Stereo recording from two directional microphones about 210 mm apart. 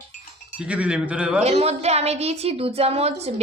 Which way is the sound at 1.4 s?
30° right (ahead or behind).